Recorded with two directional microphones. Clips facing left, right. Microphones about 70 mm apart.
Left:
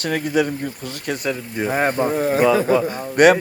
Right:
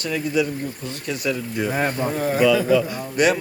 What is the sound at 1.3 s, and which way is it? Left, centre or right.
Speech, left.